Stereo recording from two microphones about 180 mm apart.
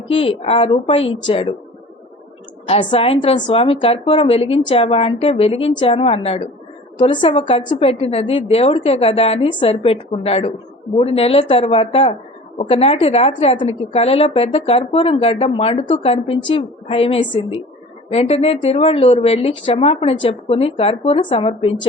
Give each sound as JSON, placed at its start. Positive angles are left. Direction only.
{"t": 0.1, "sound": "a woman's voice", "side_deg": 30}
{"t": 2.6, "sound": "a woman's voice", "side_deg": 30}